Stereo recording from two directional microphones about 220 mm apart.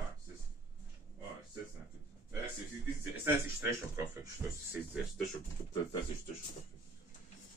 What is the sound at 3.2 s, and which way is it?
Speech, 10° right (ahead or behind).